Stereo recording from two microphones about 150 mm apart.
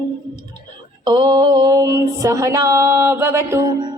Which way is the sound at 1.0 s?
25° right (ahead or behind).